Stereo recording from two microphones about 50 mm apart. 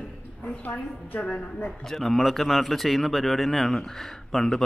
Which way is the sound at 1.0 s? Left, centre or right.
Left.